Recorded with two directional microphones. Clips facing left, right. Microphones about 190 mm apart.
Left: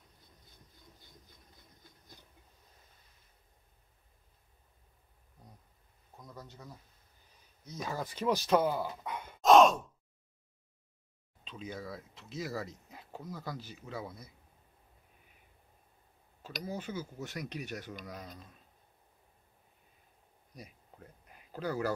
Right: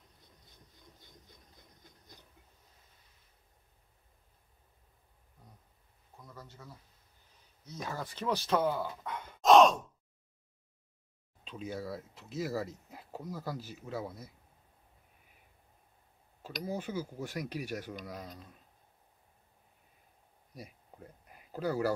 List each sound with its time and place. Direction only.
6.1 s a sound: 15° left (ahead or behind)
7.6 s speech: 15° left (ahead or behind)
9.4 s sigh: centre (ahead or behind)
11.4 s speech: 5° right (ahead or behind)
16.6 s speech: 10° right (ahead or behind)
21.5 s speech: 10° right (ahead or behind)